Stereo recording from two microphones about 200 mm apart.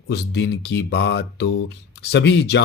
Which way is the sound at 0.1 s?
60° left (ahead or behind).